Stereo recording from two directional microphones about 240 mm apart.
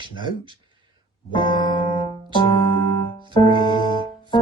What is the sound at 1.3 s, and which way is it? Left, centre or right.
Music, centre.